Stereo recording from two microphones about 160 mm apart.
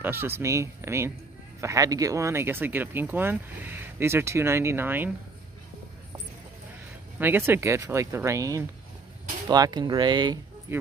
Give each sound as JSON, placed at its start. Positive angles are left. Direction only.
{"t": 0.0, "sound": "speech", "side_deg": -15}
{"t": 7.2, "sound": "speech", "side_deg": -15}
{"t": 10.7, "sound": "speech", "side_deg": -15}